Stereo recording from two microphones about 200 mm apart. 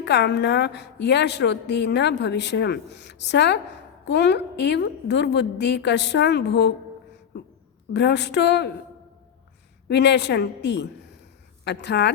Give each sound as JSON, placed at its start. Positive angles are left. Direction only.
{"t": 0.0, "sound": "a woman's voice", "side_deg": 60}
{"t": 7.9, "sound": "a woman's voice", "side_deg": 60}
{"t": 9.9, "sound": "a woman's voice", "side_deg": 60}